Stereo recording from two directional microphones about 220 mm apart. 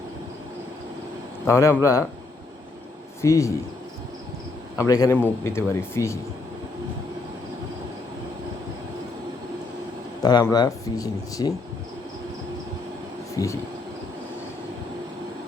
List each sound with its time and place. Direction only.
1.5 s speech: 10° left (ahead or behind)
3.2 s speech: 15° left (ahead or behind)
4.8 s speech: 15° left (ahead or behind)
10.2 s speech: 20° left (ahead or behind)
13.3 s speech: 15° left (ahead or behind)